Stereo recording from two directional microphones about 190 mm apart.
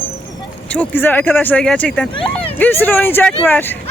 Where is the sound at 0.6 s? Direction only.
5° left (ahead or behind).